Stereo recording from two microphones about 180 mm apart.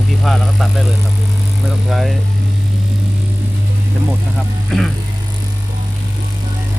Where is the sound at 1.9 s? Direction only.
Centre (ahead or behind).